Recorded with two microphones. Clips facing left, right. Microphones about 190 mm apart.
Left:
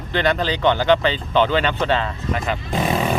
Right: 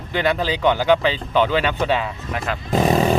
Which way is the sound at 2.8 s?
40° right (ahead or behind).